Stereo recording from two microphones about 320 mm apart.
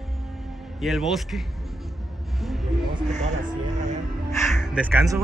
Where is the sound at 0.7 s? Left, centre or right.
Centre.